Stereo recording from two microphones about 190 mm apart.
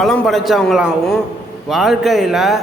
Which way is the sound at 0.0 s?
Centre (ahead or behind).